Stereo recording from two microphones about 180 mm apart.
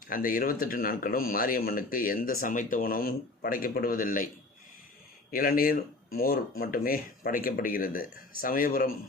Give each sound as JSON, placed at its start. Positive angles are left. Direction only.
{"t": 0.1, "sound": "speech", "side_deg": 50}
{"t": 5.3, "sound": "speech", "side_deg": 55}